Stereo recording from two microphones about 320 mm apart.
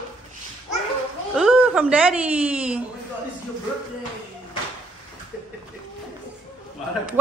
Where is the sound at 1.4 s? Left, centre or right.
Centre.